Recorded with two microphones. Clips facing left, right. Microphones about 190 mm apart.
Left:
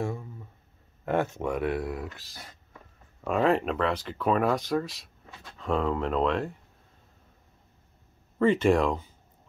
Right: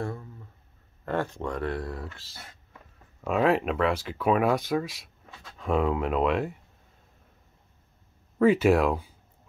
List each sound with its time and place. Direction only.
0.0 s a sound: 10° left (ahead or behind)
1.0 s speech: 15° left (ahead or behind)
3.3 s speech: 5° right (ahead or behind)
8.4 s speech: 5° right (ahead or behind)